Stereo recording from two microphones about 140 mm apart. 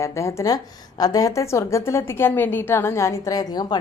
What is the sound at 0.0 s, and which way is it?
A woman's voice, 20° left (ahead or behind).